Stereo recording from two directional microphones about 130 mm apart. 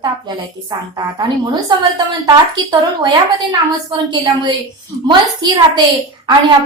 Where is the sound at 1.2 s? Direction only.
35° right (ahead or behind).